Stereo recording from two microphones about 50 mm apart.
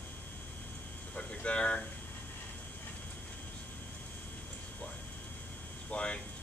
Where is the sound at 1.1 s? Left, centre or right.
Left.